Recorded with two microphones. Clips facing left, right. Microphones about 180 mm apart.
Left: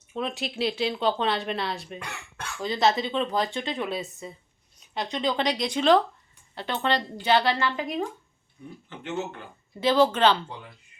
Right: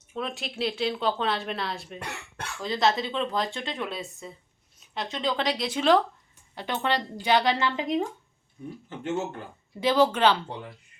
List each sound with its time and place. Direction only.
0.1 s a woman's voice: centre (ahead or behind); by 8.0 s 20° right (ahead or behind)
8.9 s speech: 45° right (ahead or behind)
9.8 s speech: 10° right (ahead or behind)